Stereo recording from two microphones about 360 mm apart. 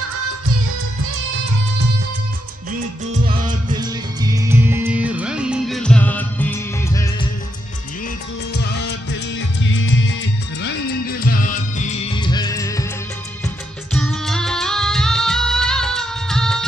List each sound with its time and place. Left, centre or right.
3.1 s music: centre
9.6 s music: left; by 12.8 s centre
13.9 s music: centre